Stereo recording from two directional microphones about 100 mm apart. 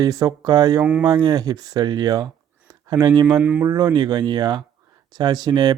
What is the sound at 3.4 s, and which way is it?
Speech, 20° right (ahead or behind).